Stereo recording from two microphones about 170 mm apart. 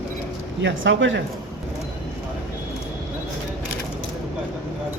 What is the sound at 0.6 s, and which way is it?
Speech, 90° right.